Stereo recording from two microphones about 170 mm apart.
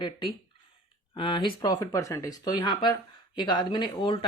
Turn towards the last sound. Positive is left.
turn(degrees=25)  # may be behind; listen again after turning